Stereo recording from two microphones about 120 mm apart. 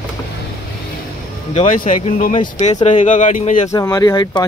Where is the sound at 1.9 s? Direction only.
85° left.